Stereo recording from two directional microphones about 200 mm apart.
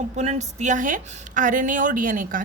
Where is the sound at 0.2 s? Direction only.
35° right (ahead or behind).